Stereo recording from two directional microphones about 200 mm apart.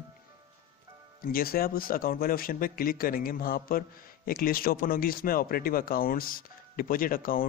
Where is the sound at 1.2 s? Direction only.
45° left (ahead or behind).